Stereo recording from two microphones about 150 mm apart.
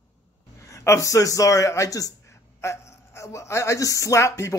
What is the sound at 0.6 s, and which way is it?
A man's voice, 20° left (ahead or behind).